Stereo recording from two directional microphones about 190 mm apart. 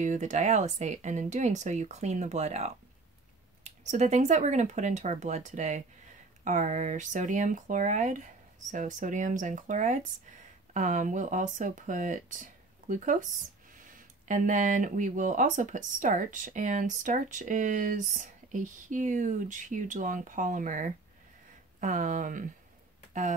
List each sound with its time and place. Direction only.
0.0 s speech: 40° right (ahead or behind)